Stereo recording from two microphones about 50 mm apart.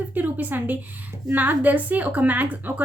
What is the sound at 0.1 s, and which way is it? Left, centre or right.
A woman's voice, right.